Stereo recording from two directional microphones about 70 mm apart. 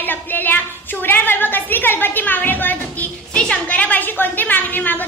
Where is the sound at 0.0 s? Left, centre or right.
Left.